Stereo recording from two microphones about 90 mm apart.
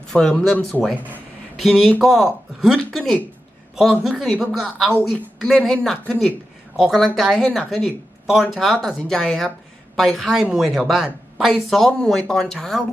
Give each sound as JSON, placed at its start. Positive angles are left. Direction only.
{"t": 0.1, "sound": "speech", "side_deg": 5}
{"t": 0.9, "sound": "speech", "side_deg": -20}
{"t": 1.5, "sound": "speech", "side_deg": 0}
{"t": 4.4, "sound": "speech", "side_deg": 0}
{"t": 8.3, "sound": "speech", "side_deg": 0}